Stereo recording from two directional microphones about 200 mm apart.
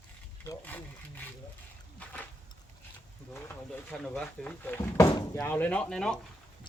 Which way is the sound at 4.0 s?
5° left (ahead or behind).